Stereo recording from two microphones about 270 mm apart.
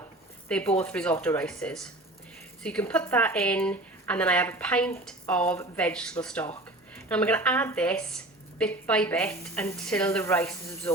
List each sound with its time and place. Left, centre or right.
0.4 s speech: centre